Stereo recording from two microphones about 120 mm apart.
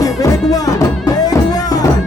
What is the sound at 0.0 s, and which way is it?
Music, 30° left (ahead or behind).